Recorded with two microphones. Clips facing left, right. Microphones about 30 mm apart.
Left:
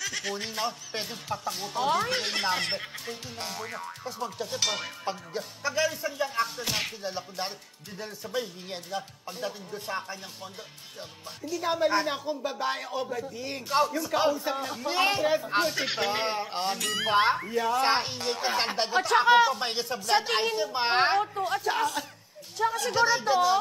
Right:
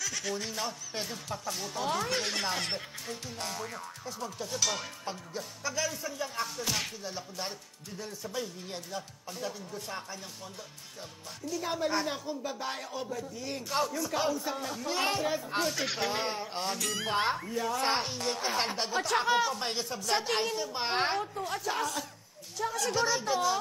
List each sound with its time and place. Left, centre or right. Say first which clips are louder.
0.0 s speech: left 2 dB; left
3.4 s boing: left 2 dB; centre
3.8 s speech: left 4 dB; left
11.6 s speech: left 6 dB; left
18.2 s boing: left 3 dB; centre
18.6 s speech: left 4 dB; left